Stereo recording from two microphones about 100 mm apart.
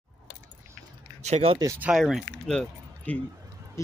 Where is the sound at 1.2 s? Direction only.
80° right.